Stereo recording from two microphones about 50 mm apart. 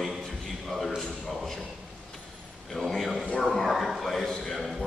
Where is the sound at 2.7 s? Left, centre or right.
Centre.